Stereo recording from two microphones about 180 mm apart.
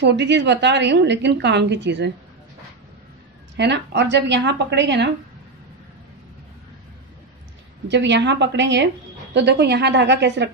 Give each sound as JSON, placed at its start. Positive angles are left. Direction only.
{"t": 0.0, "sound": "a woman's voice", "side_deg": -75}
{"t": 3.5, "sound": "a woman's voice", "side_deg": -75}
{"t": 7.9, "sound": "a woman's voice", "side_deg": -75}